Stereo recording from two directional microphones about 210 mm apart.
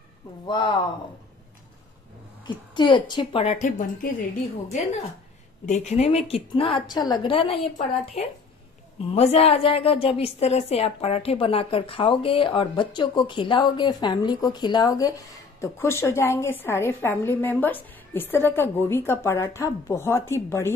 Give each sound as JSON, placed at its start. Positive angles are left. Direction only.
{"t": 0.5, "sound": "a woman's voice", "side_deg": 20}
{"t": 2.4, "sound": "a woman's voice", "side_deg": 20}
{"t": 3.4, "sound": "a woman's voice", "side_deg": 35}
{"t": 5.7, "sound": "a woman's voice", "side_deg": 30}